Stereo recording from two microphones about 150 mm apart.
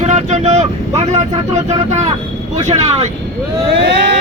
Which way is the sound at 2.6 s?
45° right (ahead or behind).